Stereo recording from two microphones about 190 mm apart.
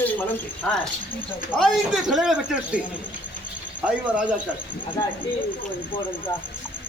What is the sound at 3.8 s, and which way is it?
Speech, 5° right (ahead or behind).